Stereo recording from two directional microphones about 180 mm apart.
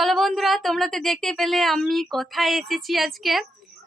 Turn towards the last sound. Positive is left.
turn(degrees=0)  # may be behind; listen again after turning